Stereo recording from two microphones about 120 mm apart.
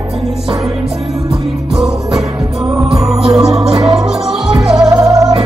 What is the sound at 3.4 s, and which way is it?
Music, 5° right (ahead or behind).